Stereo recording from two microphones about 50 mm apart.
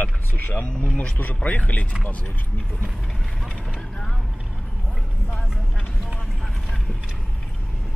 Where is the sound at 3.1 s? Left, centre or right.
Centre.